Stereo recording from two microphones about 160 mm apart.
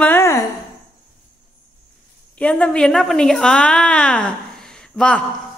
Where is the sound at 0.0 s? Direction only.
15° left (ahead or behind).